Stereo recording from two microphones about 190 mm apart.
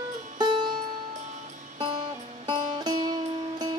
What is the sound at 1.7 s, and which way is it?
Music, 25° right (ahead or behind).